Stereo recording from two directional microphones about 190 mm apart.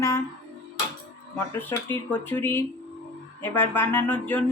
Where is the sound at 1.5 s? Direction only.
10° left (ahead or behind).